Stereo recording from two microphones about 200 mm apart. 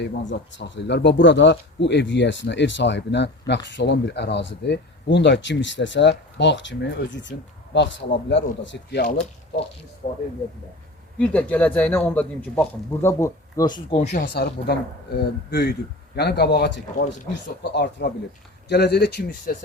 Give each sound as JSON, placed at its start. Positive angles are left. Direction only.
{"t": 0.0, "sound": "speech", "side_deg": 60}
{"t": 9.0, "sound": "speech", "side_deg": 40}
{"t": 11.2, "sound": "a man's voice", "side_deg": 5}
{"t": 14.0, "sound": "speech", "side_deg": 40}
{"t": 14.3, "sound": "speech", "side_deg": 55}